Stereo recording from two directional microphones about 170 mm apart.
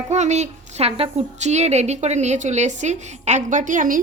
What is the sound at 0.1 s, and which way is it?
A woman's voice, 40° right (ahead or behind).